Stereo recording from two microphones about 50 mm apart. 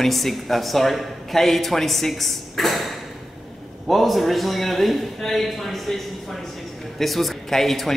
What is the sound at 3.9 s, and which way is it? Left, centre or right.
A man's voice, centre.